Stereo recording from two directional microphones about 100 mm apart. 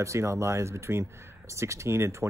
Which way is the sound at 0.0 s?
30° right (ahead or behind).